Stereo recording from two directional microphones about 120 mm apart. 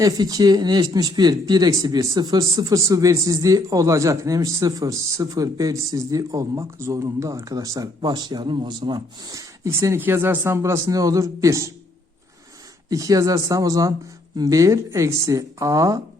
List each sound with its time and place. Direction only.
0.0 s speech: 30° right (ahead or behind)
12.9 s speech: 30° right (ahead or behind)